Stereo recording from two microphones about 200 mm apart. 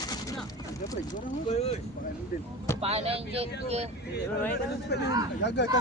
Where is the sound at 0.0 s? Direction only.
20° left (ahead or behind).